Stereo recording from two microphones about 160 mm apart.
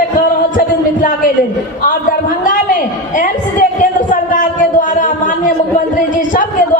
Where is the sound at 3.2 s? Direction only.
55° left (ahead or behind).